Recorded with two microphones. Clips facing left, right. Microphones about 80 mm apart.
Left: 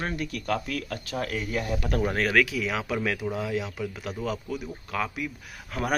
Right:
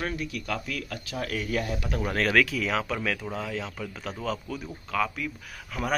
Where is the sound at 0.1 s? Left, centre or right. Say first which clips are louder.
Left 3 dB; left.